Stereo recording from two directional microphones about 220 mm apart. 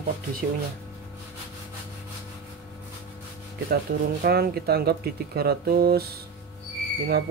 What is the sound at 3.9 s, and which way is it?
Speech, 40° right (ahead or behind).